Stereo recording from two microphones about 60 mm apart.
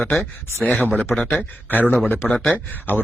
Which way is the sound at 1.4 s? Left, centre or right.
Left.